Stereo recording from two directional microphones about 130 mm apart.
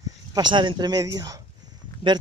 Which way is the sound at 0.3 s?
35° right (ahead or behind).